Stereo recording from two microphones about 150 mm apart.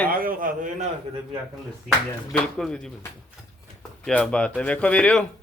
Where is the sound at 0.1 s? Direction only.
70° right (ahead or behind).